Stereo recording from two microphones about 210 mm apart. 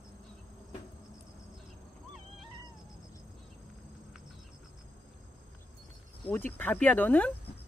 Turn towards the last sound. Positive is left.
turn(degrees=10)  # may be behind; listen again after turning